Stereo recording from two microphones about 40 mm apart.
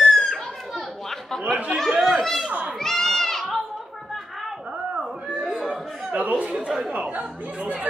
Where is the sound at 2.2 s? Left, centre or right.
Centre.